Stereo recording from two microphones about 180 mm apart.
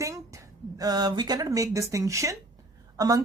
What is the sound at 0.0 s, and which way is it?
A woman's voice, 20° right (ahead or behind).